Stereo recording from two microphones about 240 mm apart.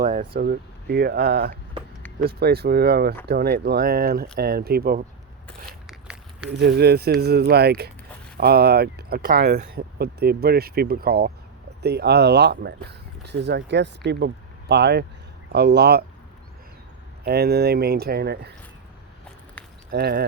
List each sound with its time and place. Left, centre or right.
0.0 s speech: right
5.5 s a sound: centre
6.5 s speech: right
17.2 s speech: right
19.9 s speech: right